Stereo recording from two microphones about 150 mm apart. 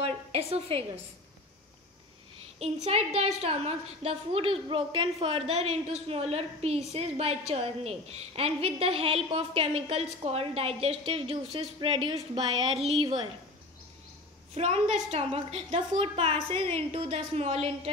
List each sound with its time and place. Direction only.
0.0 s a woman's voice: 40° right (ahead or behind)
2.6 s a woman's voice: 45° right (ahead or behind)
14.5 s a woman's voice: 45° right (ahead or behind)